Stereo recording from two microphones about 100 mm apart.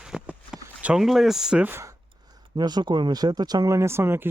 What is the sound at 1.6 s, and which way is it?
Speech, 25° right (ahead or behind).